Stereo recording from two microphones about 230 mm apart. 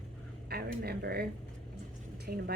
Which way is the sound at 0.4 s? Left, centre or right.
Right.